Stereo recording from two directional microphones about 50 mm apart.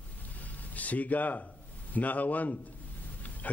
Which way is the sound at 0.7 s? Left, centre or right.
Left.